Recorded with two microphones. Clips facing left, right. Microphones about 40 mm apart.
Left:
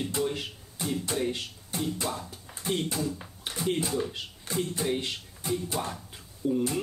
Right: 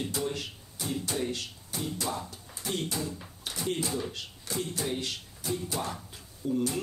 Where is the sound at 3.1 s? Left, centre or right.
Left.